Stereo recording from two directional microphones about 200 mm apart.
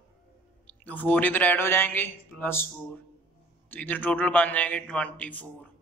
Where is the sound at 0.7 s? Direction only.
10° left (ahead or behind).